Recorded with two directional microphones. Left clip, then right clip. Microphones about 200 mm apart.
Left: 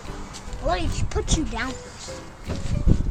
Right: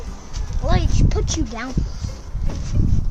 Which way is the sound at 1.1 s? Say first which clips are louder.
Left 2 dB; 55° right (ahead or behind).